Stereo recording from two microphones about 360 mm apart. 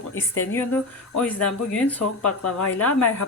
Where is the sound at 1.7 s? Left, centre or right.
Centre.